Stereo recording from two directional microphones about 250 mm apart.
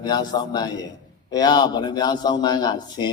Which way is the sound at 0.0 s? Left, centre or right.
Centre.